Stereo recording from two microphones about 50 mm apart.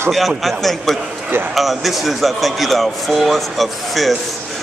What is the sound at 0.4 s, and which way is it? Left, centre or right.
Speech, centre.